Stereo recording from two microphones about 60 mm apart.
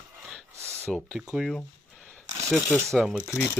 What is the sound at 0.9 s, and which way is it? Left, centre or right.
Speech, centre.